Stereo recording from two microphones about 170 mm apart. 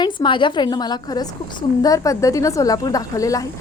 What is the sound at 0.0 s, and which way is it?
A woman's voice, 30° left (ahead or behind).